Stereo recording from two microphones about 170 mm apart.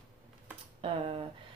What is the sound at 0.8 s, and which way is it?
Speech, 35° right (ahead or behind).